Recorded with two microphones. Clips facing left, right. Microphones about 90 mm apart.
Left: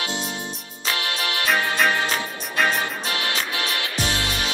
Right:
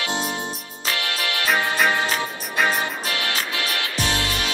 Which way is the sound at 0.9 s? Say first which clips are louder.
Even; 30° left (ahead or behind).